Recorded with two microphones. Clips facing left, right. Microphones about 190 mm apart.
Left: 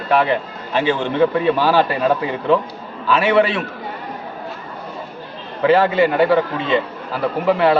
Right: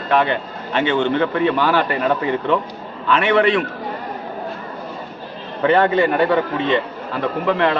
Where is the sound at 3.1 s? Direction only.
5° left (ahead or behind).